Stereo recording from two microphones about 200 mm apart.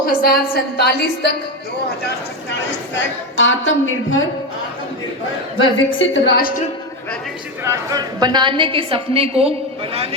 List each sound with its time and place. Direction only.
0.0 s a woman's voice: 45° left (ahead or behind)
2.9 s a woman's voice: 65° left (ahead or behind)
5.5 s a woman's voice: 75° left (ahead or behind)
7.6 s a woman's voice: 15° right (ahead or behind)